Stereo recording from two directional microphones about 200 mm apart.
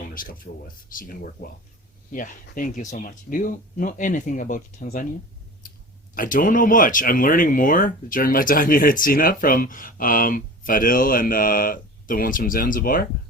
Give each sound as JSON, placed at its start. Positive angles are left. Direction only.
{"t": 0.1, "sound": "speech", "side_deg": 45}
{"t": 5.6, "sound": "clicking", "side_deg": 45}
{"t": 6.1, "sound": "speech", "side_deg": 45}